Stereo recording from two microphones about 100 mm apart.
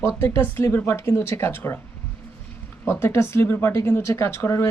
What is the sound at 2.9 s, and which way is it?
Speech, 25° left (ahead or behind).